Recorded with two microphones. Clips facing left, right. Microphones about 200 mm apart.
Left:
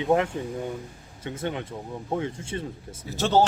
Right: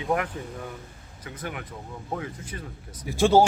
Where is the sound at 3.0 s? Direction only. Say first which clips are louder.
Right 3 dB; 10° right (ahead or behind).